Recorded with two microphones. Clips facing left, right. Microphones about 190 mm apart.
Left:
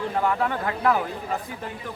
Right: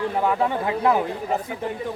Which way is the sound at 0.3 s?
20° right (ahead or behind).